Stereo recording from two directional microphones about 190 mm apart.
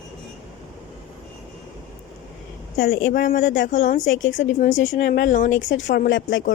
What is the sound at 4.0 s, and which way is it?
Speech, 85° left.